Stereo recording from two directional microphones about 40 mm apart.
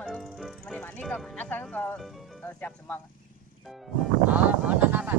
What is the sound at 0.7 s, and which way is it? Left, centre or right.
Music, left.